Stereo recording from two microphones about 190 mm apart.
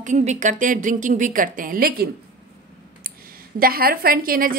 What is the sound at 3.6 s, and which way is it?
Speech, 50° right (ahead or behind).